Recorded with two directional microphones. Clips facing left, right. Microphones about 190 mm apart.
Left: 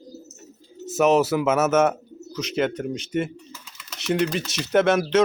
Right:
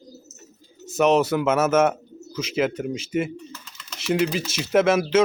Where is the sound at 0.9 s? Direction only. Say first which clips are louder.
Even; 5° left (ahead or behind).